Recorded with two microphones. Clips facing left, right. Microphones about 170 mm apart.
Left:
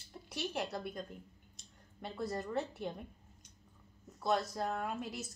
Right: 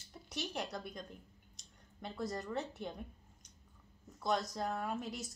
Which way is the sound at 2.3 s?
Centre (ahead or behind).